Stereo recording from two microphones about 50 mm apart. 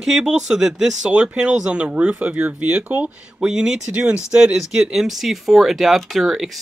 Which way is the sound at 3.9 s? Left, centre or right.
Right.